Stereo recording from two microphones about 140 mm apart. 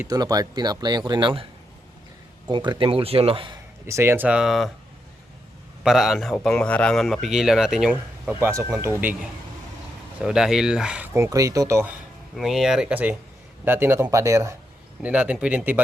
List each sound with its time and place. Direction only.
0.1 s speech: 25° right (ahead or behind)
2.5 s a man's voice: 35° right (ahead or behind)
3.8 s speech: 20° right (ahead or behind); by 4.7 s centre (ahead or behind)
5.8 s speech: centre (ahead or behind)
8.3 s speech: 15° right (ahead or behind)
10.2 s speech: 5° right (ahead or behind)
11.1 s speech: 20° right (ahead or behind)
12.4 s speech: centre (ahead or behind); by 14.5 s 20° right (ahead or behind)
15.0 s speech: 10° right (ahead or behind)